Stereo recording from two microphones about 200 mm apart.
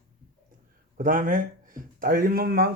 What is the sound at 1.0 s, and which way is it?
Speech, 40° right (ahead or behind).